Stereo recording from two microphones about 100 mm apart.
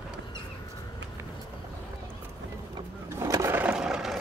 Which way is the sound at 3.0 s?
30° right (ahead or behind).